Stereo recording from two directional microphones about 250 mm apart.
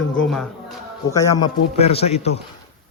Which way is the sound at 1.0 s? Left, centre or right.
Centre.